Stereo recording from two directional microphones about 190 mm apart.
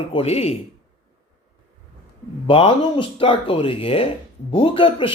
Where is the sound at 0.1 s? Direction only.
30° left (ahead or behind).